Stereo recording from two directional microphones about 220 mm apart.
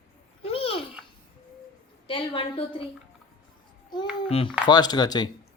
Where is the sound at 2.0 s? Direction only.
25° left (ahead or behind).